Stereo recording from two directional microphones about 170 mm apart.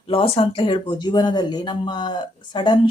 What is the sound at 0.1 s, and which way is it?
Speech, 30° left (ahead or behind).